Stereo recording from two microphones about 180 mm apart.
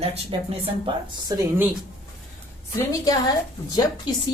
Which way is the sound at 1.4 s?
10° right (ahead or behind).